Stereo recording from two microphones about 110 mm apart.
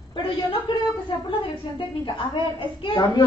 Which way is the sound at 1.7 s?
45° left (ahead or behind).